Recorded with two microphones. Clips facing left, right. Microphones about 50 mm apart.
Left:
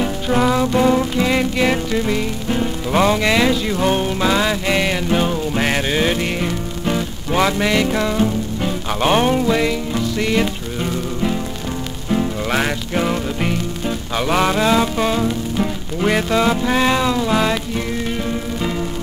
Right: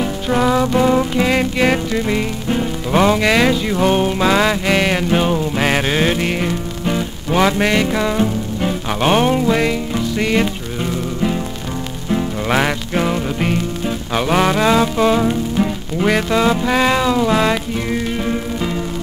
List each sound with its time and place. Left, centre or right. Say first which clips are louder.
0.0 s music: right 1 dB; centre
0.7 s music: right 1 dB; centre
3.2 s music: right 2 dB; centre
7.5 s music: right 1 dB; centre
12.4 s music: right 3 dB; centre
15.1 s music: right 3 dB; centre